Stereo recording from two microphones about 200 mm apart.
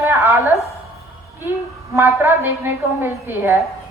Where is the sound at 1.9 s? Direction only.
10° right (ahead or behind).